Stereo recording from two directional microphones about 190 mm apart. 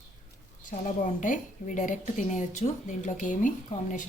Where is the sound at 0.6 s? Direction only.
45° left (ahead or behind).